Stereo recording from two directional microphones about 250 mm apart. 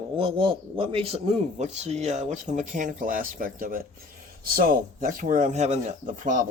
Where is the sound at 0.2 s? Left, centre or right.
Right.